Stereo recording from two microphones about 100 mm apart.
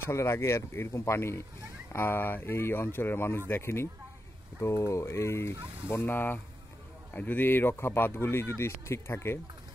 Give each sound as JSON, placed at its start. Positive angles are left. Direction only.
{"t": 0.0, "sound": "speech", "side_deg": 25}